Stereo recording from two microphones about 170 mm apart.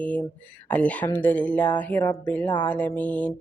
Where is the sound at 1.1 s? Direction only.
10° left (ahead or behind).